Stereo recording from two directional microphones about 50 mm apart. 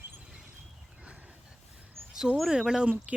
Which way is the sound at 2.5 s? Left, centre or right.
Centre.